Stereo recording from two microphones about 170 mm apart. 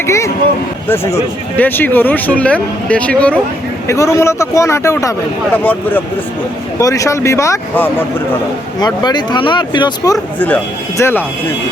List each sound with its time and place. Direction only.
0.0 s speech: 15° left (ahead or behind)
6.7 s speech: 20° left (ahead or behind)
8.8 s speech: 25° left (ahead or behind)
10.4 s speech: 10° left (ahead or behind)